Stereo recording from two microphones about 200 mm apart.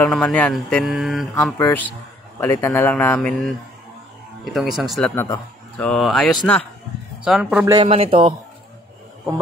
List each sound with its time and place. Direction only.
0.0 s speech: 5° left (ahead or behind)
1.3 s speech: 10° left (ahead or behind)
4.6 s speech: centre (ahead or behind)
5.1 s speech: 10° left (ahead or behind); by 7.6 s 5° right (ahead or behind)
7.6 s speech: 25° right (ahead or behind)